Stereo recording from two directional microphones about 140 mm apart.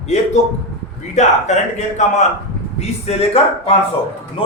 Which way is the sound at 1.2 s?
55° left (ahead or behind).